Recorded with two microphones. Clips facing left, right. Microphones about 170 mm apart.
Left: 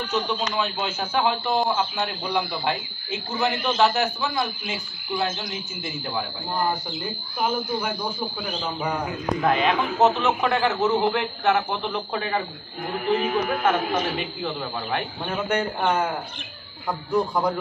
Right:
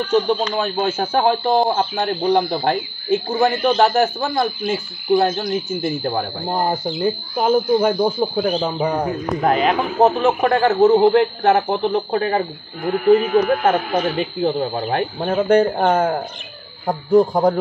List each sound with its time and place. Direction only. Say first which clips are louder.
0.1 s speech: right 9 dB; 50° right (ahead or behind)
8.7 s speech: right 7 dB; 35° right (ahead or behind)
10.1 s speech: right 6 dB; 45° right (ahead or behind)